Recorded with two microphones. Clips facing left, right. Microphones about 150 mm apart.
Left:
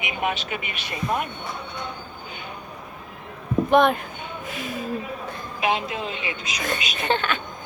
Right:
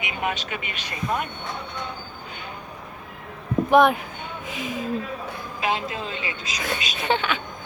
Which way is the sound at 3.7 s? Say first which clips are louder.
Right 1 dB; 10° right (ahead or behind).